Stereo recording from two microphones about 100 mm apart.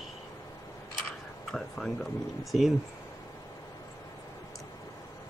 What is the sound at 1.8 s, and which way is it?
Speech, 10° right (ahead or behind).